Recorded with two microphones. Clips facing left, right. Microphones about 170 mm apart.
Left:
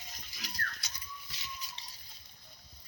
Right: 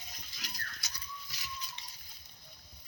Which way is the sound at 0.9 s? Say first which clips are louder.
Right 1 dB; 25° left (ahead or behind).